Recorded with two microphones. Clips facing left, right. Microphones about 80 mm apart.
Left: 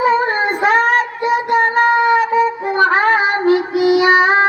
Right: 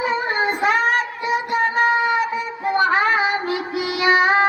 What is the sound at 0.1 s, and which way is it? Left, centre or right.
Child singing, left.